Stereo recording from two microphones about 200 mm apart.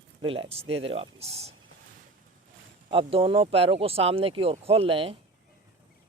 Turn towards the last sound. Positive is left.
turn(degrees=-30)  # may be behind; listen again after turning